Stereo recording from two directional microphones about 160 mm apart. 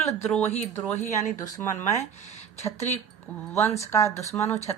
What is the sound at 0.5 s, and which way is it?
Speech, 45° left (ahead or behind).